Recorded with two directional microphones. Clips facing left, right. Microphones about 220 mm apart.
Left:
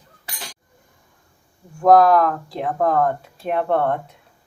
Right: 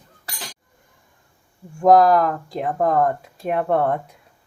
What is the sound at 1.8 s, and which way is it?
Speech, centre (ahead or behind).